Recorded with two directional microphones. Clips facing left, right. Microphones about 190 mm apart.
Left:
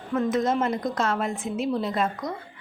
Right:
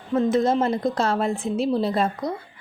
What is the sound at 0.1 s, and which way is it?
Speech, 30° right (ahead or behind).